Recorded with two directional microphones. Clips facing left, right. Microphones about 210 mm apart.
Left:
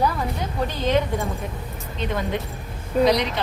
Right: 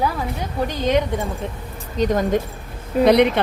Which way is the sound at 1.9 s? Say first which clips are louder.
Right 8 dB; 40° right (ahead or behind).